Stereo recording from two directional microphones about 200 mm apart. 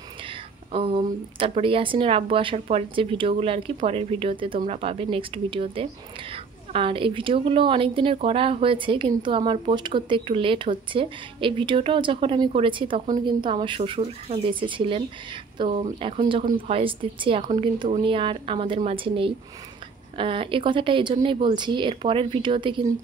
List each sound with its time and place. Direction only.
0.3 s a woman's voice: 25° right (ahead or behind)